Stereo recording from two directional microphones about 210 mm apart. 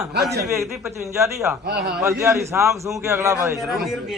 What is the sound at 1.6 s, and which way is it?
Speech, 50° right (ahead or behind).